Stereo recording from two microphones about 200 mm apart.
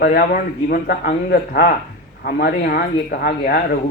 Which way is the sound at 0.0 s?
50° left (ahead or behind).